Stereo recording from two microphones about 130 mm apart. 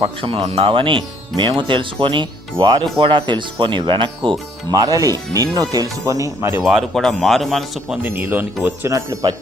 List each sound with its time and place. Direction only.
0.0 s speech: 45° right (ahead or behind)
4.7 s speech: 30° right (ahead or behind)
6.6 s speech: centre (ahead or behind)
8.0 s speech: 15° right (ahead or behind)